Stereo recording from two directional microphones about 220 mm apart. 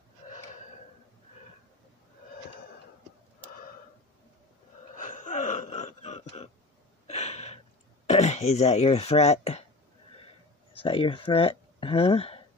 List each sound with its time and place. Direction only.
4.9 s wail: 35° left (ahead or behind)
7.1 s a sound: 30° left (ahead or behind)
8.1 s speech: 30° left (ahead or behind)
10.7 s speech: 25° left (ahead or behind)